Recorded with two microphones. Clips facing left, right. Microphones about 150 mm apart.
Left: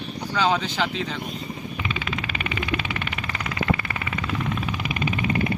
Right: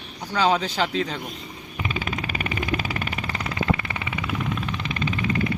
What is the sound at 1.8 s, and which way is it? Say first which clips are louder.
Vehicle: right 3 dB; 40° right (ahead or behind).